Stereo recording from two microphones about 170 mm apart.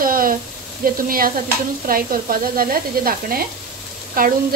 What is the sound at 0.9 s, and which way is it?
Sizzle, 55° right (ahead or behind).